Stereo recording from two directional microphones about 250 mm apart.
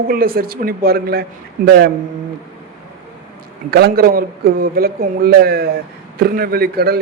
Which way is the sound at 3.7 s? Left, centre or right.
Right.